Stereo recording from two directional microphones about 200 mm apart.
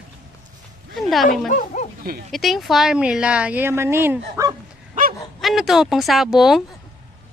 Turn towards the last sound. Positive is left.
turn(degrees=0)  # may be behind; listen again after turning